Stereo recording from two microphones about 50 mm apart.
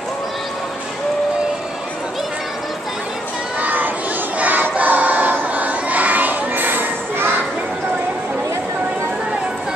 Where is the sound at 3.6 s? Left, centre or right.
Right.